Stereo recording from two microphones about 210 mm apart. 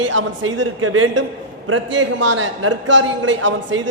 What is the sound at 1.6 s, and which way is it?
A woman's voice, 65° right (ahead or behind).